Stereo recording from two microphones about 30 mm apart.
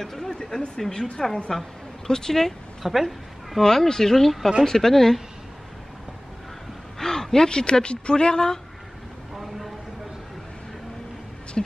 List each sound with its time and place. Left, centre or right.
0.0 s speech: centre
0.4 s speech: left
0.7 s speech: centre
2.8 s speech: centre
3.6 s speech: centre
7.0 s a sound: centre
7.3 s speech: left
9.3 s a sound: centre
11.6 s speech: centre